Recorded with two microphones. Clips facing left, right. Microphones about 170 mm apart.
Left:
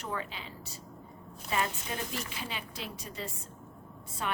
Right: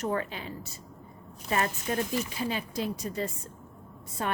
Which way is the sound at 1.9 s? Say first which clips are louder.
Right 8 dB; 50° right (ahead or behind).